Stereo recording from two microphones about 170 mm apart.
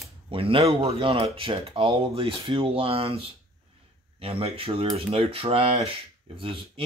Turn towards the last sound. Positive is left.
turn(degrees=-30)  # may be behind; listen again after turning